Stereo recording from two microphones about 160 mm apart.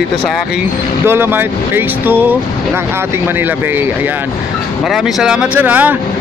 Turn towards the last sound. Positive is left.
turn(degrees=-10)  # may be behind; listen again after turning